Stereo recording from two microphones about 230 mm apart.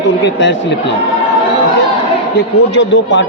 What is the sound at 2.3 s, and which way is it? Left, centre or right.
Speech, left.